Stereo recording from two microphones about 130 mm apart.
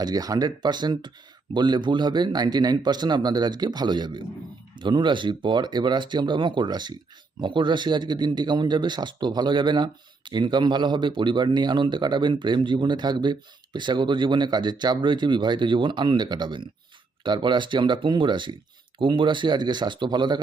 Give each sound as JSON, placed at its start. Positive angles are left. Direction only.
{"t": 0.0, "sound": "a man's voice", "side_deg": -30}